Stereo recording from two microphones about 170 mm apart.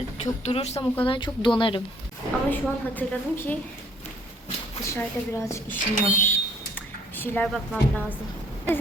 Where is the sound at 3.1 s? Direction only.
10° left (ahead or behind).